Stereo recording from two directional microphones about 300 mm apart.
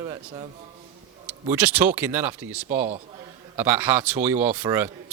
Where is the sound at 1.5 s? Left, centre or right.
Centre.